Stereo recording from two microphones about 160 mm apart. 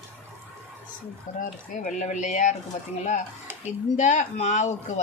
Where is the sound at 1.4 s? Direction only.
55° left (ahead or behind).